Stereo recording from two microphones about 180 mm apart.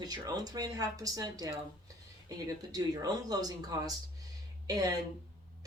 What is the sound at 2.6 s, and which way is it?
Speech, 20° right (ahead or behind).